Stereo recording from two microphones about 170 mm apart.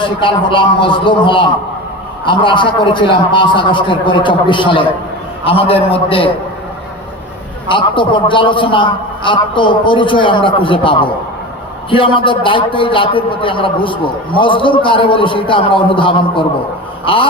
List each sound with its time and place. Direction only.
0.0 s a man's voice: 30° left (ahead or behind)
7.7 s a man's voice: 30° left (ahead or behind)